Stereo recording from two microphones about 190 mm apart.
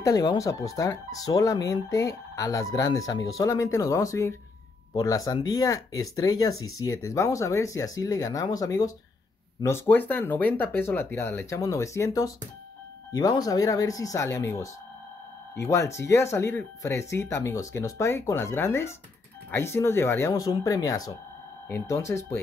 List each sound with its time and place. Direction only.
0.0 s speech: 20° left (ahead or behind)